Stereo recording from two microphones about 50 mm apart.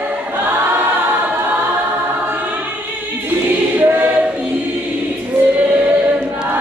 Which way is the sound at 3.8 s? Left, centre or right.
Right.